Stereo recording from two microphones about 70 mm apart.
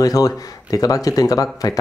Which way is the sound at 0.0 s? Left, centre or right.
Left.